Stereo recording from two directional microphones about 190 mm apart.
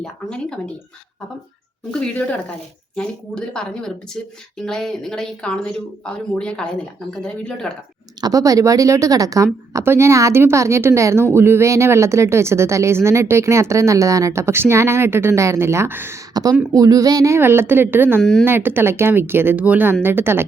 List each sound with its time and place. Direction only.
0.0 s speech: 5° left (ahead or behind)
1.9 s speech: 5° left (ahead or behind)
7.2 s speech: 5° left (ahead or behind)
8.2 s speech: 20° right (ahead or behind)
18.2 s speech: 5° left (ahead or behind)
18.4 s speech: 10° right (ahead or behind)